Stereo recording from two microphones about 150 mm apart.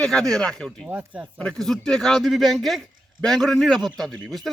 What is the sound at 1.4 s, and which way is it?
A man's voice, 5° left (ahead or behind).